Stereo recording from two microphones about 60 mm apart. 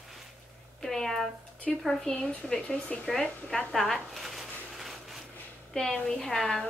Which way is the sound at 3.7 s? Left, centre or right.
Centre.